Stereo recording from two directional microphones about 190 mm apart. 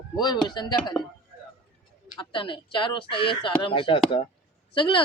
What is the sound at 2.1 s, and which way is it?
A woman's voice, 25° left (ahead or behind).